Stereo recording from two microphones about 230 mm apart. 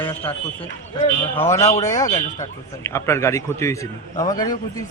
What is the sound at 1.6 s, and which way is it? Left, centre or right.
A man's voice, centre.